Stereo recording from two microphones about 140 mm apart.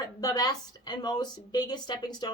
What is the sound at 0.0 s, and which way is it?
A woman's voice, 25° left (ahead or behind).